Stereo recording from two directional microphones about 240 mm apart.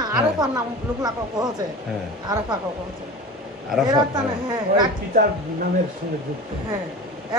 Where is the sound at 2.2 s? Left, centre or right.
Centre.